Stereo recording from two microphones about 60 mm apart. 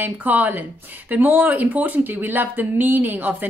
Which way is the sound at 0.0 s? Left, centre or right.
Right.